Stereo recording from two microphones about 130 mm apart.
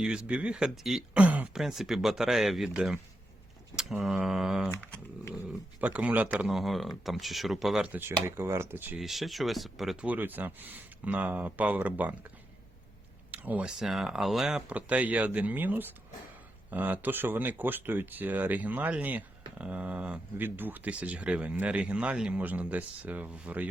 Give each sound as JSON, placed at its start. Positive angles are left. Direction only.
{"t": 0.0, "sound": "speech", "side_deg": -5}
{"t": 4.7, "sound": "speech", "side_deg": 10}
{"t": 5.8, "sound": "speech", "side_deg": -10}
{"t": 8.4, "sound": "speech", "side_deg": -20}
{"t": 9.0, "sound": "speech", "side_deg": 0}
{"t": 13.3, "sound": "speech", "side_deg": -10}